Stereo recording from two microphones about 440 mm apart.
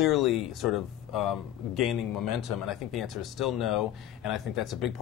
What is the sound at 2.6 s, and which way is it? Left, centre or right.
Speech, centre.